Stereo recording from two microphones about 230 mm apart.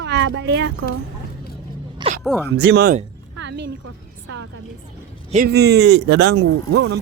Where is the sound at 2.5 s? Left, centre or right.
Right.